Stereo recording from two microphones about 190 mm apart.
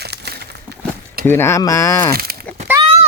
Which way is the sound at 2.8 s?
30° right (ahead or behind).